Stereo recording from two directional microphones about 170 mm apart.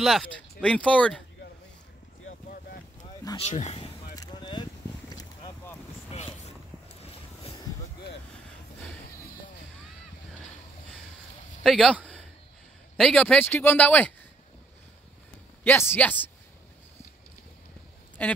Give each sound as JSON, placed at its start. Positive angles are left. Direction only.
{"t": 0.0, "sound": "speech", "side_deg": 0}
{"t": 2.5, "sound": "boat", "side_deg": 55}
{"t": 3.3, "sound": "speech", "side_deg": 40}
{"t": 4.1, "sound": "a sound", "side_deg": 25}
{"t": 6.1, "sound": "a sound", "side_deg": 35}
{"t": 7.0, "sound": "vehicle", "side_deg": 35}
{"t": 11.6, "sound": "speech", "side_deg": 0}
{"t": 15.6, "sound": "speech", "side_deg": 10}
{"t": 18.2, "sound": "speech", "side_deg": 10}